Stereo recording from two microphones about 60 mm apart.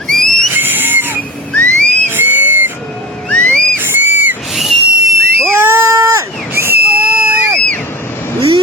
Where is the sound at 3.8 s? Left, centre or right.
Right.